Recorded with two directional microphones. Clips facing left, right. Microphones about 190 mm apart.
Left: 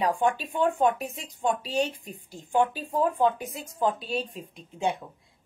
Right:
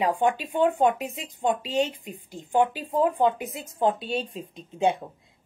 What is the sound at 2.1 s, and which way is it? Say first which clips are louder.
Speech: right 2 dB; 15° right (ahead or behind).